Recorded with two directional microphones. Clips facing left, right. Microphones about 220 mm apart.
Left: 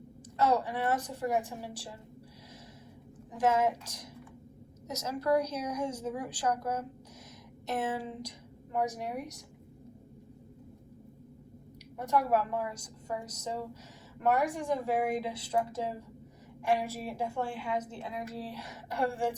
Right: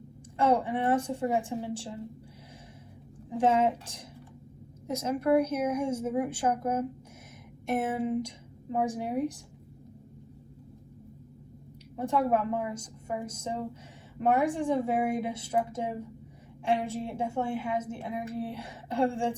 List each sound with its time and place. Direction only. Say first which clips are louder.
0.3 s a woman's voice: right 3 dB; 25° right (ahead or behind)
3.2 s a woman's voice: right 3 dB; 25° right (ahead or behind)
11.9 s a woman's voice: right 2 dB; 25° right (ahead or behind)